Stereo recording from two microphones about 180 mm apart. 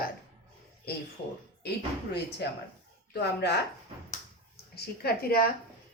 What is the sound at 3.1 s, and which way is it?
Speech, 70° left (ahead or behind).